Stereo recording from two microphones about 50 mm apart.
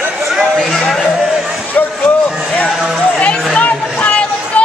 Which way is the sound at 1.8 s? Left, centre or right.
Left.